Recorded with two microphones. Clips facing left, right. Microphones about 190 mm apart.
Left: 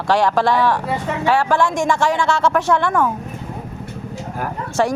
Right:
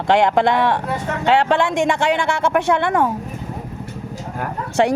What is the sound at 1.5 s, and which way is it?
Speech, 60° right (ahead or behind).